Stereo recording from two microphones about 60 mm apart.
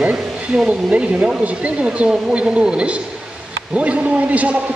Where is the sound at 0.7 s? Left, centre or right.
Right.